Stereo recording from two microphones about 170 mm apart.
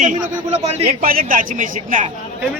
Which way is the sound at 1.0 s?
55° right (ahead or behind).